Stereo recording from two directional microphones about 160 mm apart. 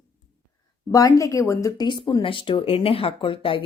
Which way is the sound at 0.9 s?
20° left (ahead or behind).